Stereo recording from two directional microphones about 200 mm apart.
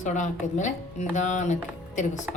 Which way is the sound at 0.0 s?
35° left (ahead or behind).